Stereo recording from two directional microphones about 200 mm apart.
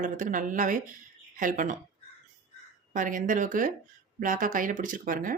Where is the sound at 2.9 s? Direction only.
40° right (ahead or behind).